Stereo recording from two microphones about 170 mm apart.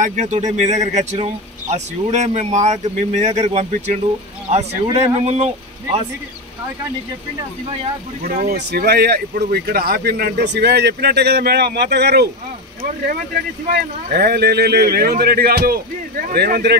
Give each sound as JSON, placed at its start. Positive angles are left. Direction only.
{"t": 0.0, "sound": "speech", "side_deg": -45}
{"t": 8.3, "sound": "speech", "side_deg": -55}
{"t": 8.5, "sound": "speech", "side_deg": -70}
{"t": 13.7, "sound": "speech", "side_deg": -65}